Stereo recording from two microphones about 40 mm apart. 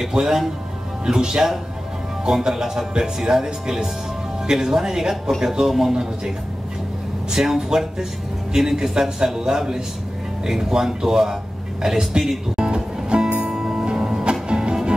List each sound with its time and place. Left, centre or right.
0.1 s speech: centre
12.6 s music: right